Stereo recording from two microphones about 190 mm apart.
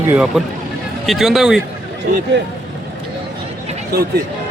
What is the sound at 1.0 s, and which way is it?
Speech, centre (ahead or behind).